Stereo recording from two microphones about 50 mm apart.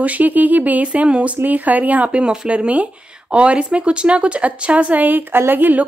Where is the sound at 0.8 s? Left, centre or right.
Right.